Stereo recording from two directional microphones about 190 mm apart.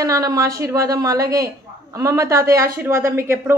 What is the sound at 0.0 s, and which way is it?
Speech, 20° right (ahead or behind).